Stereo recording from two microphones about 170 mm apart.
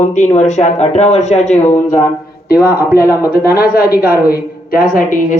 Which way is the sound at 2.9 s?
65° left (ahead or behind).